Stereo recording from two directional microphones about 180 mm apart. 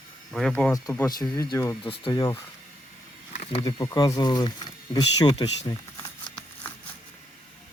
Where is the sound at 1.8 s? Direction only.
30° left (ahead or behind).